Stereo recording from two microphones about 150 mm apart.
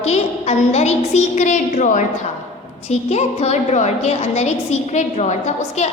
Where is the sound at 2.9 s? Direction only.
45° left (ahead or behind).